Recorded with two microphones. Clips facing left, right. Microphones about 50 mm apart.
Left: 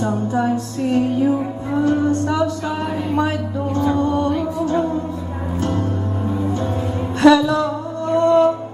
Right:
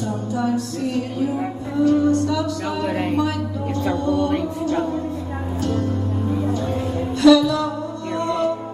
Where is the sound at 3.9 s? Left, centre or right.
Left.